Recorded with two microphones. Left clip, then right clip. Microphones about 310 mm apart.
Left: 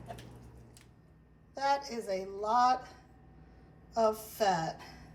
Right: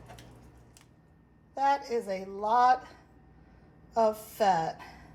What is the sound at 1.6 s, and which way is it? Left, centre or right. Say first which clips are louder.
A woman's voice: right 4 dB; centre.